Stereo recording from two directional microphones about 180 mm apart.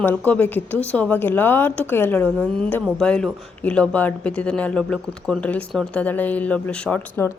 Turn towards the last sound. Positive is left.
turn(degrees=10)  # may be behind; listen again after turning